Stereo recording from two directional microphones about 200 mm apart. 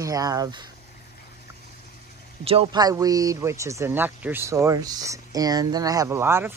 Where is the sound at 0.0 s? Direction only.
15° right (ahead or behind).